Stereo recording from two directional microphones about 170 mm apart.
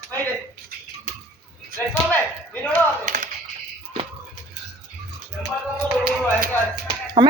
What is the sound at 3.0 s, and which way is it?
Tap, 45° right (ahead or behind).